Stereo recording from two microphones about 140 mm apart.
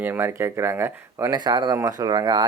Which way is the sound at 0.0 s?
15° right (ahead or behind).